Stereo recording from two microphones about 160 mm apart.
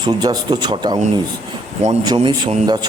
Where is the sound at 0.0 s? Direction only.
25° right (ahead or behind).